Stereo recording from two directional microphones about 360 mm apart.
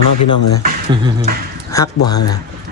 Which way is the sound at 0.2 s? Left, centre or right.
Left.